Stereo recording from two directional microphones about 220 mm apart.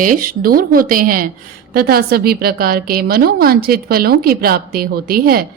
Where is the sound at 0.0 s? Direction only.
40° right (ahead or behind).